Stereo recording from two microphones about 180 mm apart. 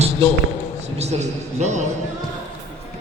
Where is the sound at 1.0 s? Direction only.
40° right (ahead or behind).